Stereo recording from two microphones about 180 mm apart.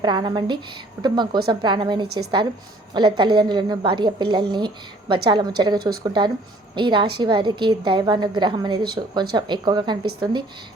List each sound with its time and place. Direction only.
0.0 s a woman's voice: 25° right (ahead or behind)